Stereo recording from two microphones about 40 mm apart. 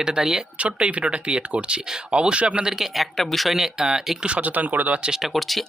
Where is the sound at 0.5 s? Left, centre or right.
Right.